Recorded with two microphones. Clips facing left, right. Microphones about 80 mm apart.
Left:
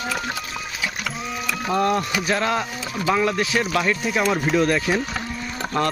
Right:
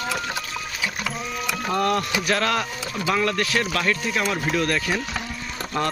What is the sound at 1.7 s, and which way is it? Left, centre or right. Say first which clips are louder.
Speech: left 2 dB; centre.